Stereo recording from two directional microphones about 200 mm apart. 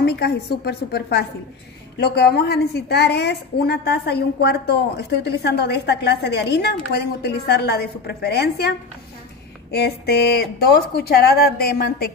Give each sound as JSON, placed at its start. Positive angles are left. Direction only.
{"t": 0.0, "sound": "a woman's voice", "side_deg": 55}